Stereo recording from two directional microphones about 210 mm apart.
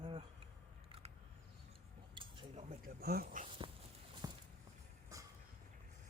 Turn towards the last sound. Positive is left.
turn(degrees=-15)  # may be behind; listen again after turning